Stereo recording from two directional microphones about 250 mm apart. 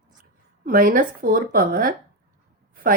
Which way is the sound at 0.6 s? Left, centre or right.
Right.